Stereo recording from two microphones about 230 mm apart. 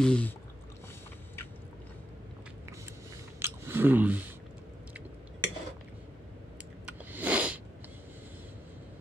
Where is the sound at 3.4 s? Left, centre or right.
Centre.